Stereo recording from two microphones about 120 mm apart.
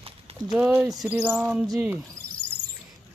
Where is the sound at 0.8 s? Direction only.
20° right (ahead or behind).